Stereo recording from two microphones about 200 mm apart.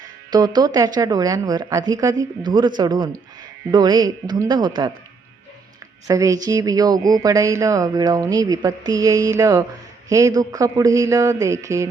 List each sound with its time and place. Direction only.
0.3 s speech: 20° right (ahead or behind)
6.1 s speech: 15° right (ahead or behind)